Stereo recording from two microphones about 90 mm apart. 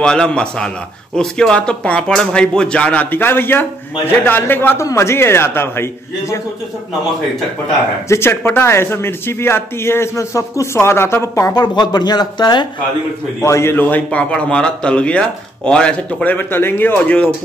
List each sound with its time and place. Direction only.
0.0 s a man's voice: 10° left (ahead or behind); by 5.9 s 25° left (ahead or behind)
8.1 s a man's voice: 30° left (ahead or behind)
11.5 s speech: 55° left (ahead or behind)
13.4 s a man's voice: 30° left (ahead or behind); by 16.3 s 10° left (ahead or behind)
16.3 s a man's voice: 25° left (ahead or behind)